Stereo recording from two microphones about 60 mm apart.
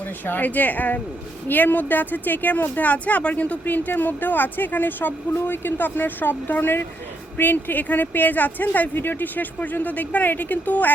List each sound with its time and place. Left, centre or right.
0.3 s speech: left